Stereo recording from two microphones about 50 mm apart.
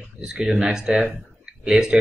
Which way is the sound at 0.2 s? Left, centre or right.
Centre.